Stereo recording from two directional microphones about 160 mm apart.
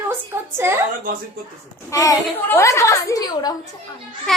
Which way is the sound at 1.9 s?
20° left (ahead or behind).